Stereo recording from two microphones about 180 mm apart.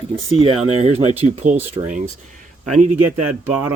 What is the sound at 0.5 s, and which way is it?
Speech, 35° right (ahead or behind).